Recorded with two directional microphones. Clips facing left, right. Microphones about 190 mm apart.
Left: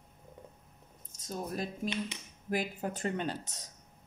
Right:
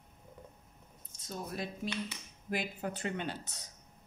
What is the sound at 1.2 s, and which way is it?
Speech, 45° left (ahead or behind).